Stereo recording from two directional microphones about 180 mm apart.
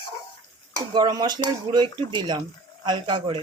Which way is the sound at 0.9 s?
25° right (ahead or behind).